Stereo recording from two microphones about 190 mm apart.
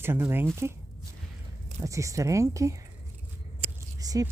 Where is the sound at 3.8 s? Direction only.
20° right (ahead or behind).